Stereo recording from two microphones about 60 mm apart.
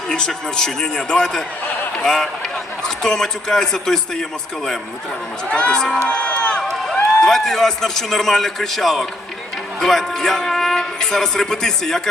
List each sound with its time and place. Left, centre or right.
0.1 s a man's voice: centre
5.5 s a man's voice: centre
6.1 s run: centre
7.2 s a man's voice: centre